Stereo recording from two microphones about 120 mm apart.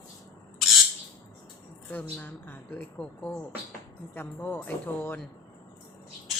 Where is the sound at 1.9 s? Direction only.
15° left (ahead or behind).